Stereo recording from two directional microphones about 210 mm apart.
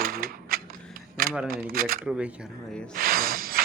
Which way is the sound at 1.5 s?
45° right (ahead or behind).